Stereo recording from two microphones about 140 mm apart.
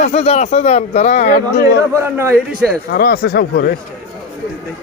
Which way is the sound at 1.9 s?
15° right (ahead or behind).